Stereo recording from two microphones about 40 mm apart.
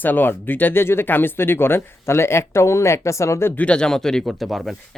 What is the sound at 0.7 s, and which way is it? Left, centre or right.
Speech, left.